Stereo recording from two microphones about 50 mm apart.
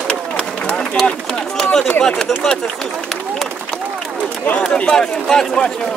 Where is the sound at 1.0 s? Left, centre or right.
Centre.